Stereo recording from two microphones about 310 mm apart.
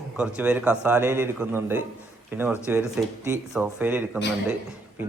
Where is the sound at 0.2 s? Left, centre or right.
Centre.